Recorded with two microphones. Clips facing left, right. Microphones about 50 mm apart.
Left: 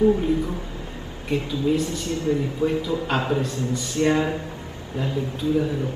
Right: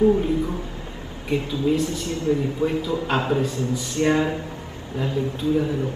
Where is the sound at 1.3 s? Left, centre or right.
Centre.